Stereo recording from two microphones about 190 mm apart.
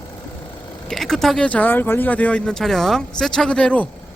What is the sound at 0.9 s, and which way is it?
Speech, centre (ahead or behind).